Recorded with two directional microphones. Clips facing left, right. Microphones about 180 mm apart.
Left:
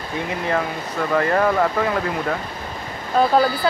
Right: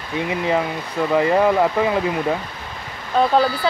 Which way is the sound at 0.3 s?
15° right (ahead or behind).